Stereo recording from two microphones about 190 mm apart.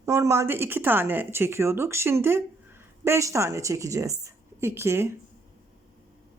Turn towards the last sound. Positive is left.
turn(degrees=-15)  # may be behind; listen again after turning